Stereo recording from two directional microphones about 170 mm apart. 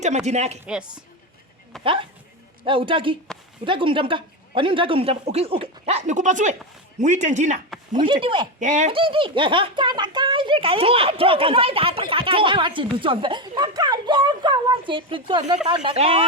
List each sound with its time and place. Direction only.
0.0 s a woman's voice: 40° right (ahead or behind)
0.6 s a woman's voice: 5° right (ahead or behind)
1.8 s a woman's voice: 30° right (ahead or behind)
7.9 s speech: 30° right (ahead or behind)
8.5 s speech: 45° right (ahead or behind)
8.9 s a woman's voice: 30° right (ahead or behind)